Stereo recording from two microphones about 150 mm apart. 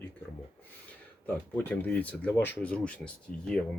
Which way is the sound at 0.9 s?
10° left (ahead or behind).